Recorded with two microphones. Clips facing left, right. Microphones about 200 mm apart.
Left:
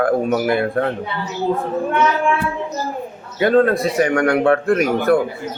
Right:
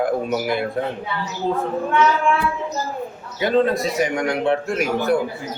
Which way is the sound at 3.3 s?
55° left (ahead or behind).